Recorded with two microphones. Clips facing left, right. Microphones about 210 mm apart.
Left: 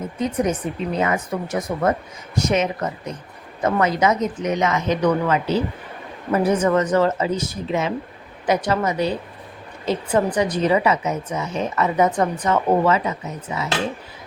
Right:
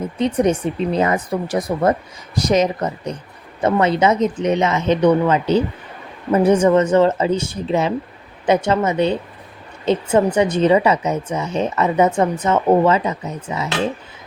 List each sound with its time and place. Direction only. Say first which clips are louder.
0.2 s speech: right 5 dB; 30° right (ahead or behind)